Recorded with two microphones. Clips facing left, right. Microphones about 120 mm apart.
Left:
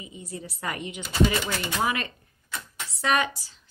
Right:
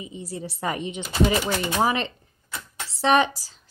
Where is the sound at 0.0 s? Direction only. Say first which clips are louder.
Right 5 dB; 30° right (ahead or behind).